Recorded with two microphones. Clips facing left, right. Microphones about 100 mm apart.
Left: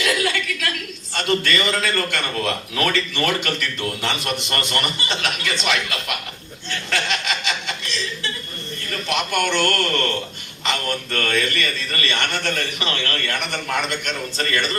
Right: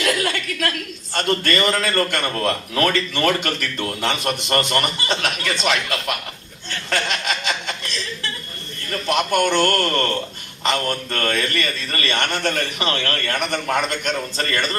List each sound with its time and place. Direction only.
0.0 s chuckle: 45° right (ahead or behind)
1.1 s a man's voice: 45° right (ahead or behind)